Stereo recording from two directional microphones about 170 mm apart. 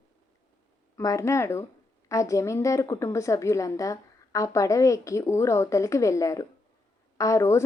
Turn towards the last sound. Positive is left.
turn(degrees=15)  # may be behind; listen again after turning